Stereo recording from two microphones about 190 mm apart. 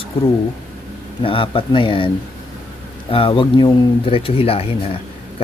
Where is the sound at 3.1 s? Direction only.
25° left (ahead or behind).